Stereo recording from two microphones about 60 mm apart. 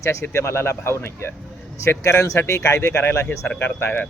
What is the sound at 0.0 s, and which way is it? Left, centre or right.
Speech, left.